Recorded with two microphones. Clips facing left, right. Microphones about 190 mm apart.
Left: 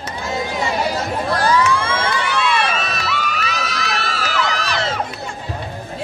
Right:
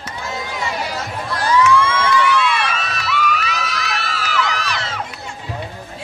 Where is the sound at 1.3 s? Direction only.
35° left (ahead or behind).